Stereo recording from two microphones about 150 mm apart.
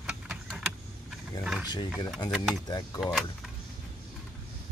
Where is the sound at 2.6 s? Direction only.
25° left (ahead or behind).